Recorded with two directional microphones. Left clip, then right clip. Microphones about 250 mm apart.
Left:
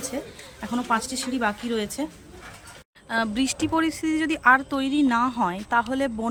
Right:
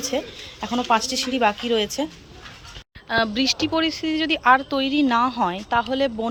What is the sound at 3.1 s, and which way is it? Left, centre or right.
Speech, centre.